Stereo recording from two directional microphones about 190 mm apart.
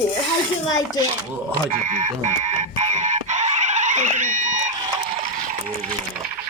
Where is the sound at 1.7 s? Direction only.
40° right (ahead or behind).